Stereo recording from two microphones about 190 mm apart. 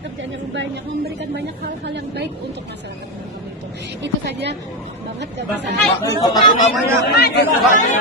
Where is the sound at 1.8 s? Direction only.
65° right (ahead or behind).